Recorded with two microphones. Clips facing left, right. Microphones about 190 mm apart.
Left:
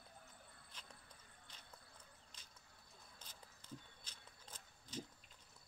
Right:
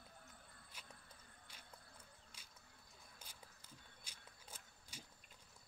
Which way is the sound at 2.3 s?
10° right (ahead or behind).